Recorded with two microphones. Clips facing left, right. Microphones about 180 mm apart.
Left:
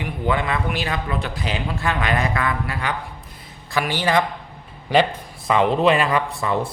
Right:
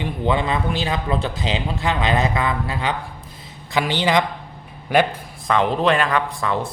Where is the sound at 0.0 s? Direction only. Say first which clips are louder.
Right 2 dB; 25° right (ahead or behind).